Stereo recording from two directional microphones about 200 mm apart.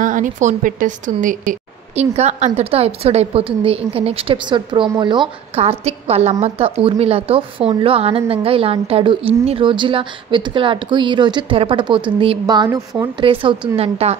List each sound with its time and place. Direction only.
0.0 s a woman's voice: 40° right (ahead or behind)